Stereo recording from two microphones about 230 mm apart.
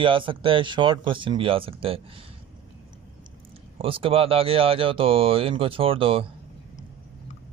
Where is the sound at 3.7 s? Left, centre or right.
Right.